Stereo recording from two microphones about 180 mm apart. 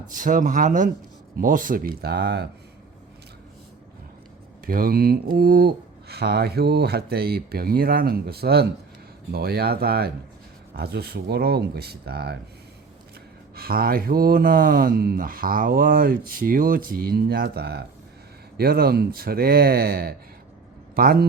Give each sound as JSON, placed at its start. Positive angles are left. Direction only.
{"t": 0.1, "sound": "speech", "side_deg": -45}
{"t": 4.6, "sound": "speech", "side_deg": -55}
{"t": 13.6, "sound": "speech", "side_deg": -55}